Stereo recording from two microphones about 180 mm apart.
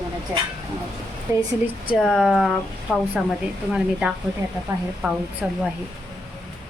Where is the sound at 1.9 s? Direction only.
Centre (ahead or behind).